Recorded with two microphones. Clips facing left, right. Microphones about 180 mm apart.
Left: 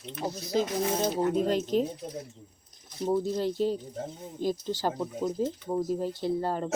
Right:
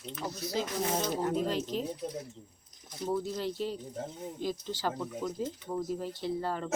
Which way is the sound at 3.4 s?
45° left (ahead or behind).